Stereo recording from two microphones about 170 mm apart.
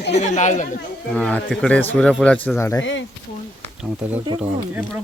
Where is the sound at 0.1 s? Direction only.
45° left (ahead or behind).